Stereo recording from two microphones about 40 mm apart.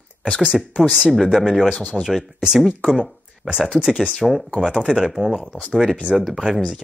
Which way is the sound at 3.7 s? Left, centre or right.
Centre.